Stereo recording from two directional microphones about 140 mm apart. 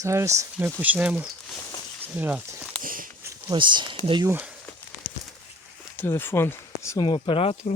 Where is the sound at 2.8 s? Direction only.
80° right.